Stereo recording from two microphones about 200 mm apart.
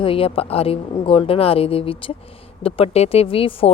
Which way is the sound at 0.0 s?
25° left (ahead or behind).